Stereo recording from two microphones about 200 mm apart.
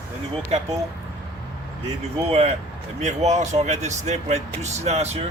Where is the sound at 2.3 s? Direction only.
35° right (ahead or behind).